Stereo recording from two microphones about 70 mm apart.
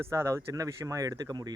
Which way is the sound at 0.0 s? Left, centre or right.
Right.